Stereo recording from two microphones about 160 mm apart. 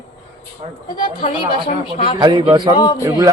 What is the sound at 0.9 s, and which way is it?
Speech, 30° left (ahead or behind).